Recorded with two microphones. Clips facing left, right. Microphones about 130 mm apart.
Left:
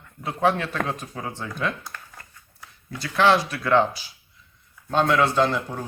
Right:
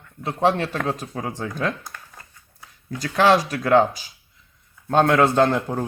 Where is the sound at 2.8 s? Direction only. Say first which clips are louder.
Right 2 dB; 45° right (ahead or behind).